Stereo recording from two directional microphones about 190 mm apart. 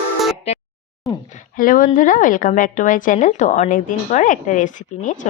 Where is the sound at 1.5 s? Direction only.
45° left (ahead or behind).